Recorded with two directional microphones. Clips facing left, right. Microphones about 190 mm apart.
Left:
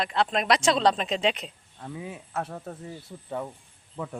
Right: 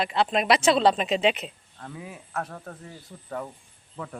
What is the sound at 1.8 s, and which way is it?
Speech, 20° left (ahead or behind).